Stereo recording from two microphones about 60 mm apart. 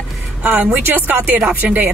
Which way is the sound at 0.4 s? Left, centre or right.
Right.